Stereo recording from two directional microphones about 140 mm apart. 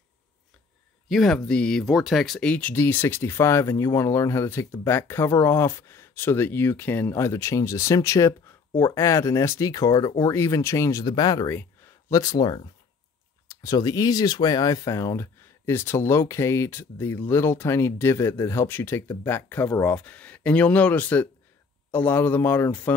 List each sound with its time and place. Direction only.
1.0 s speech: centre (ahead or behind)